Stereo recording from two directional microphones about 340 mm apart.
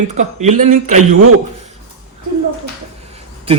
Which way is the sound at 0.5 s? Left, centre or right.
Right.